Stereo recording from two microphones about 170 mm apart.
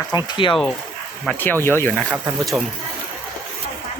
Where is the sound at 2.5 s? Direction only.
5° right (ahead or behind).